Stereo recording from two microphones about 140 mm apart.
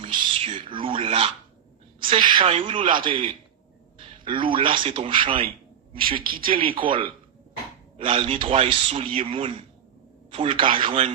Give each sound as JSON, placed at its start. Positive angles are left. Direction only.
{"t": 0.0, "sound": "a sound", "side_deg": -35}
{"t": 2.0, "sound": "a man's voice", "side_deg": -35}
{"t": 3.9, "sound": "a sound", "side_deg": -35}
{"t": 4.5, "sound": "a man's voice", "side_deg": -35}
{"t": 6.1, "sound": "a woman's voice", "side_deg": -90}
{"t": 6.4, "sound": "a man's voice", "side_deg": -35}